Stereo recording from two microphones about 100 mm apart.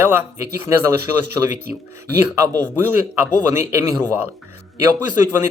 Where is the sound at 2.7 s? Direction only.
20° right (ahead or behind).